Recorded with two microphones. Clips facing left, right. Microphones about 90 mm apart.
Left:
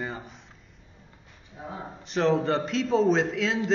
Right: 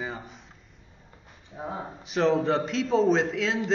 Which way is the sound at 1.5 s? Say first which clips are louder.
Right 4 dB; 50° right (ahead or behind).